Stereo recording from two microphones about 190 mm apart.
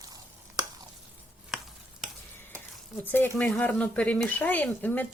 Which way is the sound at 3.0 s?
10° left (ahead or behind).